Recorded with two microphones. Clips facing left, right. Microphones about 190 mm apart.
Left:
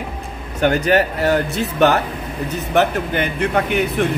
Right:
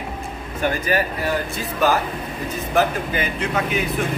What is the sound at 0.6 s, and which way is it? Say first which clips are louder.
Speech: left 6 dB; 75° left (ahead or behind).